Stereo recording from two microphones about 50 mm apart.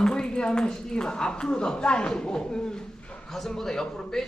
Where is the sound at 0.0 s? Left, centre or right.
Centre.